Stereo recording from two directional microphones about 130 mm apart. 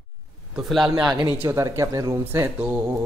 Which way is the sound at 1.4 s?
20° right (ahead or behind).